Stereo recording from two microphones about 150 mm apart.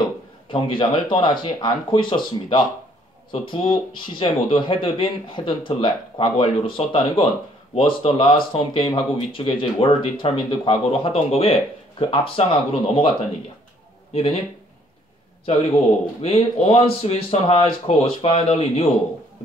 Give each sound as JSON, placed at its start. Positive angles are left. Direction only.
{"t": 0.5, "sound": "speech", "side_deg": 35}
{"t": 14.1, "sound": "speech", "side_deg": 40}
{"t": 16.2, "sound": "speech", "side_deg": 45}